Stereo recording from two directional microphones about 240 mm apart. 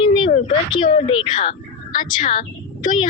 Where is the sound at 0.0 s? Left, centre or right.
Left.